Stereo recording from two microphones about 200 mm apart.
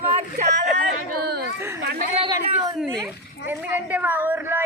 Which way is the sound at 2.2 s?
20° right (ahead or behind).